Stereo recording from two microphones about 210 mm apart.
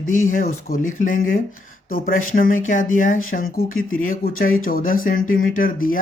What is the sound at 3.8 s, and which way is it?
Speech, 75° left (ahead or behind).